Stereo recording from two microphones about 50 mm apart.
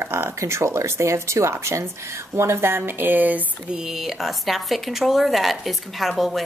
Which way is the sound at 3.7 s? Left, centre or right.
Centre.